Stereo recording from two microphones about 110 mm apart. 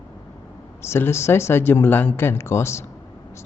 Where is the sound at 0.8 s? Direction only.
20° left (ahead or behind).